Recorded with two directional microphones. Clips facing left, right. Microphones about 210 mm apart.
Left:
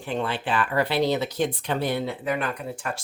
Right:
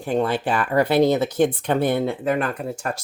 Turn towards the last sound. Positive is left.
turn(degrees=-45)  # may be behind; listen again after turning